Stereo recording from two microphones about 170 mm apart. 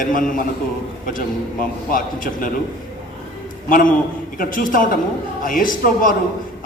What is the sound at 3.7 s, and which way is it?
A man's voice, 55° left (ahead or behind).